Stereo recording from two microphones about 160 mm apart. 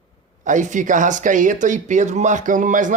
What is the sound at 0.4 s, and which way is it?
Speech, 50° right (ahead or behind).